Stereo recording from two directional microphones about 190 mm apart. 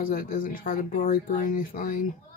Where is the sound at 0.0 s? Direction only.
50° left (ahead or behind).